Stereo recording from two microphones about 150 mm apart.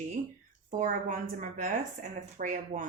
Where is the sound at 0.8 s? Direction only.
60° right (ahead or behind).